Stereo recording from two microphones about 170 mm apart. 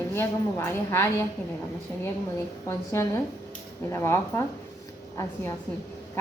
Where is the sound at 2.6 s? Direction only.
15° left (ahead or behind).